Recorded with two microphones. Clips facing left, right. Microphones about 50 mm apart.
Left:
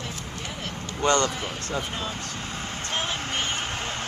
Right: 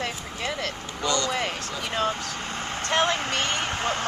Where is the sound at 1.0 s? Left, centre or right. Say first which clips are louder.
Left 4 dB; left.